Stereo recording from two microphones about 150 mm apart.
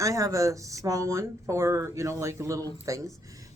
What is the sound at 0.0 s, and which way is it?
Speech, 20° right (ahead or behind).